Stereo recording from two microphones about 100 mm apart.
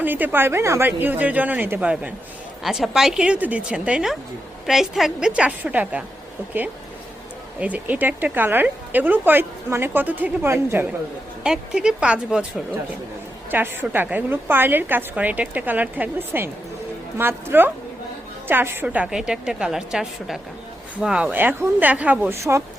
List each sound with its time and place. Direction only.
0.0 s speech: 20° right (ahead or behind)
2.6 s a woman's voice: 5° right (ahead or behind)
7.6 s speech: 15° right (ahead or behind)
11.4 s a woman's voice: 5° right (ahead or behind)
13.5 s speech: 20° right (ahead or behind)
19.1 s a woman's voice: 10° right (ahead or behind)
22.4 s speech: 30° right (ahead or behind)